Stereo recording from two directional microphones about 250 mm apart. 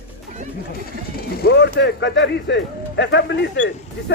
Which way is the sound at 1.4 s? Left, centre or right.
Left.